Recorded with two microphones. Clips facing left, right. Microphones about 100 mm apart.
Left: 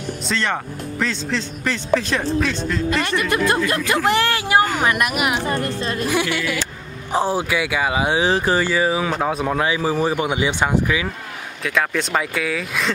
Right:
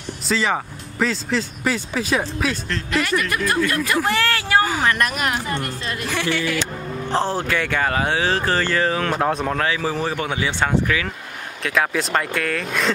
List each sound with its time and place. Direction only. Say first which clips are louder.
0.3 s speech: right 2 dB; 5° right (ahead or behind)
2.9 s speech: right 2 dB; 25° left (ahead or behind); by 5.4 s 10° left (ahead or behind)
5.5 s a woman's voice: left 4 dB; 40° left (ahead or behind)
6.0 s speech: even; 15° left (ahead or behind)
9.6 s speech: left 3 dB; 15° left (ahead or behind)
11.6 s speech: even; centre (ahead or behind)